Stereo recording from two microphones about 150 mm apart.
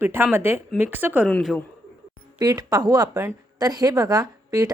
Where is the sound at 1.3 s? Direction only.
5° left (ahead or behind).